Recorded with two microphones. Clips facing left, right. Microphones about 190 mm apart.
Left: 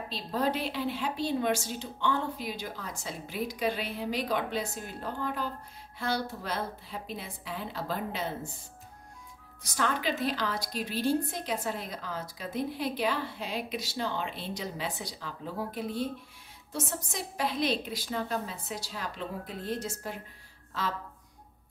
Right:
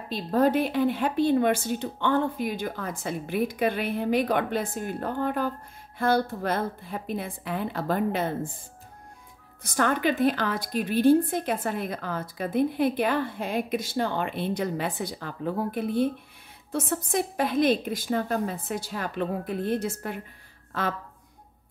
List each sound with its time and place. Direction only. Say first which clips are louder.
0.1 s a woman's voice: right 8 dB; 50° right (ahead or behind)
9.6 s a woman's voice: right 7 dB; 50° right (ahead or behind)